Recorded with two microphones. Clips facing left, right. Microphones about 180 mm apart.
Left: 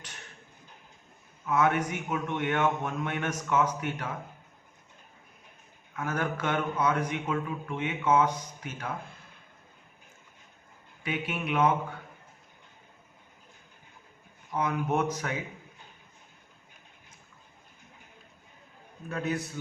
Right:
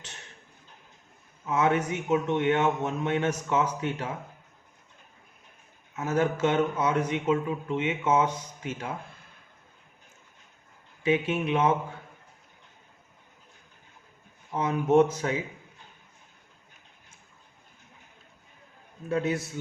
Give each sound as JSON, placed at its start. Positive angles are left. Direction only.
{"t": 1.5, "sound": "speech", "side_deg": -25}
{"t": 5.9, "sound": "speech", "side_deg": -25}
{"t": 11.0, "sound": "speech", "side_deg": -25}
{"t": 14.5, "sound": "speech", "side_deg": -25}
{"t": 19.0, "sound": "speech", "side_deg": -25}